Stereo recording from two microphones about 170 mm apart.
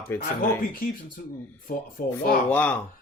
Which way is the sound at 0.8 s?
60° left (ahead or behind).